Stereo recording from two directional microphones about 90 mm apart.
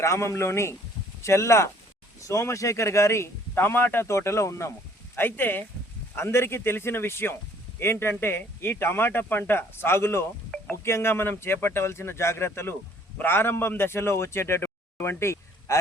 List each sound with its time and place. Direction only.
0.0 s speech: 30° left (ahead or behind)
5.1 s a man's voice: 20° left (ahead or behind)
15.2 s a sound: 30° left (ahead or behind)